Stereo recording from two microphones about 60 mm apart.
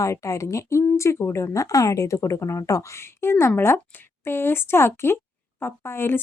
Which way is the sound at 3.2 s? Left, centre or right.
Left.